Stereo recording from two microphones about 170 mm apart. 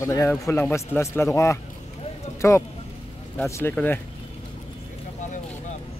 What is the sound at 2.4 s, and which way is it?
A man's voice, 15° left (ahead or behind).